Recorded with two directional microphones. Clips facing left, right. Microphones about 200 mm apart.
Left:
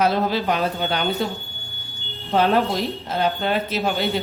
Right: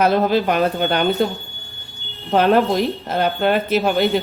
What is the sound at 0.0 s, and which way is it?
Speech, 55° right (ahead or behind).